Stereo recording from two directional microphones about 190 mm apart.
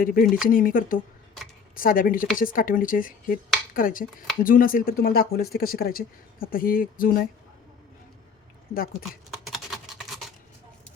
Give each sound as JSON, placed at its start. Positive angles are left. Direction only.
{"t": 0.0, "sound": "speech", "side_deg": 50}
{"t": 8.7, "sound": "speech", "side_deg": 50}
{"t": 9.5, "sound": "a sound", "side_deg": 0}